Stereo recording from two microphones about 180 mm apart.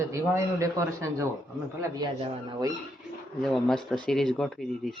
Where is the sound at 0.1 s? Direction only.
15° right (ahead or behind).